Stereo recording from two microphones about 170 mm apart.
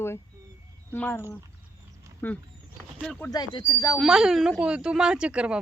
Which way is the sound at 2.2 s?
10° left (ahead or behind).